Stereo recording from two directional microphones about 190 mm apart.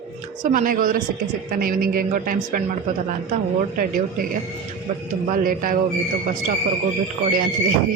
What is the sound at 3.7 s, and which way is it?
Speech, 50° right (ahead or behind).